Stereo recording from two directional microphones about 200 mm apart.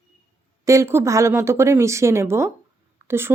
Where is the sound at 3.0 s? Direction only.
10° right (ahead or behind).